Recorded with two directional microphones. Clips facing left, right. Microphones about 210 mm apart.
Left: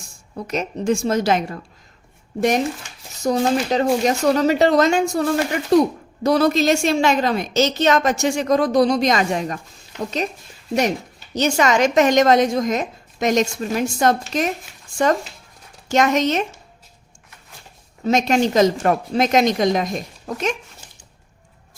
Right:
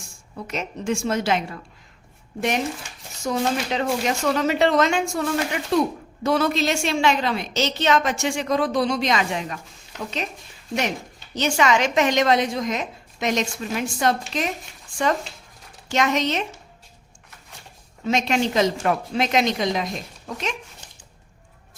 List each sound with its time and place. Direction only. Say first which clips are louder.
0.3 s a woman's voice: left 5 dB; 40° left (ahead or behind)
3.2 s a woman's voice: left 5 dB; 40° left (ahead or behind)
11.3 s a woman's voice: left 3 dB; 40° left (ahead or behind)
15.9 s a woman's voice: left 5 dB; 45° left (ahead or behind)
18.0 s a woman's voice: left 4 dB; 45° left (ahead or behind)